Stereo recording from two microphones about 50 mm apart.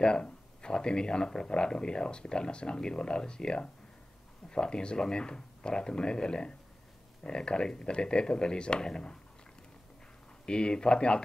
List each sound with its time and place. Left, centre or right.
0.0 s speech: centre
10.4 s speech: centre